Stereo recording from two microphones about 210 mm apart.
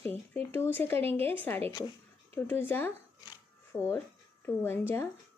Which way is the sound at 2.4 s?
10° left (ahead or behind).